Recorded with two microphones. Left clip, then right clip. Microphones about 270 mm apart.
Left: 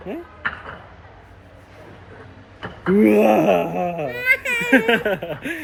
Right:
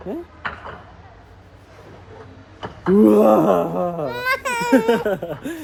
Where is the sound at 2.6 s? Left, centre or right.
Right.